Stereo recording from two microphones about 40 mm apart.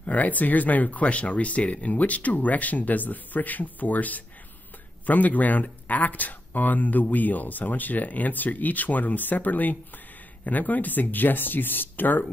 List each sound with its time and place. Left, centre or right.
0.0 s speech: left